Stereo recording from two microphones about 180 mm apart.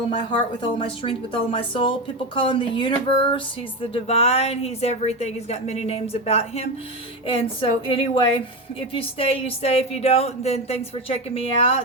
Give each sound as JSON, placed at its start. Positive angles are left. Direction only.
{"t": 0.1, "sound": "a woman's voice", "side_deg": 25}